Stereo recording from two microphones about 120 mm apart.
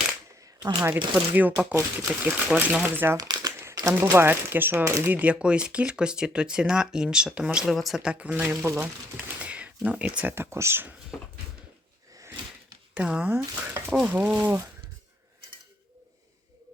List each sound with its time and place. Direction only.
0.8 s speech: 15° right (ahead or behind)
3.2 s crumpling: 35° right (ahead or behind)
3.6 s crumpling: 25° right (ahead or behind)
4.1 s speech: 20° right (ahead or behind)
5.1 s speech: 10° right (ahead or behind)
8.6 s speech: 20° right (ahead or behind)
9.1 s speech: 10° right (ahead or behind)
12.9 s speech: 10° right (ahead or behind)